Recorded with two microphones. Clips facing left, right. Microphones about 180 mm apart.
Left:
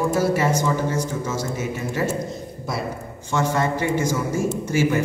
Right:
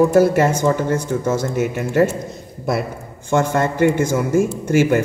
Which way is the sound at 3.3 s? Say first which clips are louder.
Right 4 dB; 55° right (ahead or behind).